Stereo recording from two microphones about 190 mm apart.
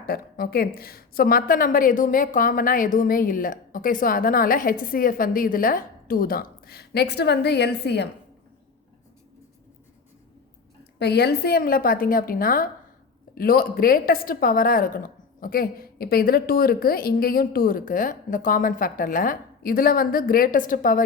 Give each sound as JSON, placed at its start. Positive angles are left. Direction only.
{"t": 0.0, "sound": "a woman's voice", "side_deg": 50}
{"t": 11.0, "sound": "a woman's voice", "side_deg": 60}